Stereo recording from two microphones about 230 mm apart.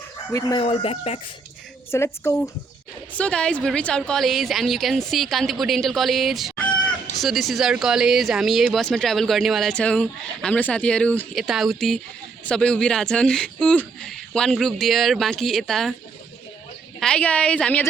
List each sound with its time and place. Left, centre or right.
0.3 s speech: left
1.9 s speech: centre
17.0 s speech: centre